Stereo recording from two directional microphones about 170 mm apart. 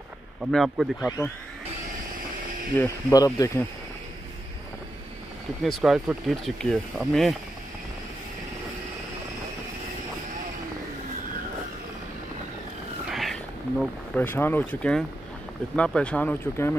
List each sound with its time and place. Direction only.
0.5 s speech: centre (ahead or behind)
1.0 s speech: 15° left (ahead or behind)
2.8 s speech: 20° left (ahead or behind)
5.6 s speech: centre (ahead or behind)
13.1 s a sound: centre (ahead or behind)
15.7 s speech: 5° left (ahead or behind)